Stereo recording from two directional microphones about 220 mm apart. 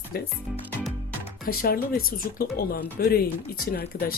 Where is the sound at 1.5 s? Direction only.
40° left (ahead or behind).